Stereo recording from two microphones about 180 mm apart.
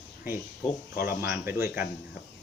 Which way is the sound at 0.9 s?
60° left (ahead or behind).